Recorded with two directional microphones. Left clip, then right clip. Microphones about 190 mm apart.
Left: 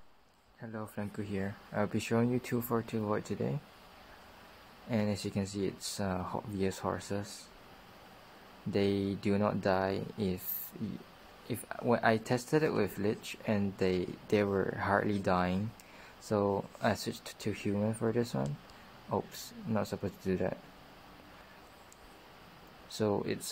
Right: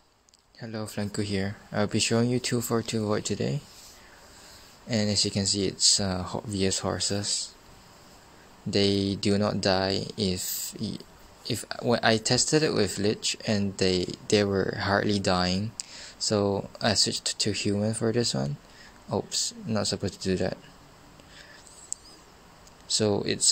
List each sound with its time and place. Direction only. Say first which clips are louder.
0.6 s speech: right 7 dB; 25° right (ahead or behind)
4.8 s speech: right 8 dB; 20° right (ahead or behind)
8.7 s speech: right 7 dB; 20° right (ahead or behind)
11.4 s speech: right 5 dB; 20° right (ahead or behind)
19.7 s speech: right 4 dB; 20° right (ahead or behind)
22.9 s speech: right 7 dB; 20° right (ahead or behind)